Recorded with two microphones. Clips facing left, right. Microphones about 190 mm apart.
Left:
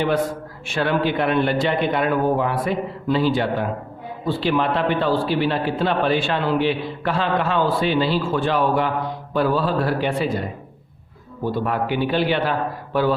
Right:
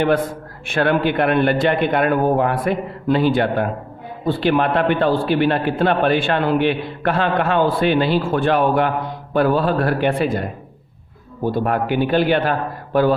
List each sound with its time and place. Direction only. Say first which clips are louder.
0.7 s a man's voice: right 3 dB; 55° right (ahead or behind)